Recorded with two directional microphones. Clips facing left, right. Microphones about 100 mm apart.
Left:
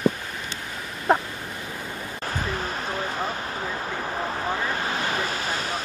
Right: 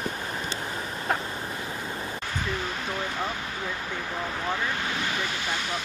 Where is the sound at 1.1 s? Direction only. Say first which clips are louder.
Left 8 dB; 30° left (ahead or behind).